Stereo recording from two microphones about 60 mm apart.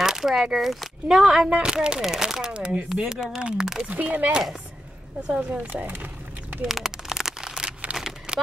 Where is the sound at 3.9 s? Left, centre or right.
Right.